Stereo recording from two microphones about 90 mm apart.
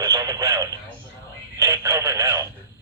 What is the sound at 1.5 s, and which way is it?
Telephone, 30° right (ahead or behind).